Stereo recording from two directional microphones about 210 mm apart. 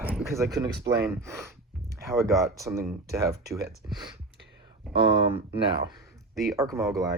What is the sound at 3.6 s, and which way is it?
Speech, 50° right (ahead or behind).